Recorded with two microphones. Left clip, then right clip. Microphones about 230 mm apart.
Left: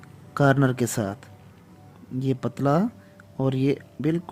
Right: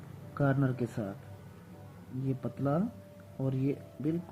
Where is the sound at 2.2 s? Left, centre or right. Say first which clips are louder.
Left 10 dB; left.